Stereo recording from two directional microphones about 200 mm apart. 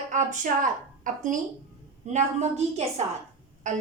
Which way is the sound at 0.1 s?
40° right (ahead or behind).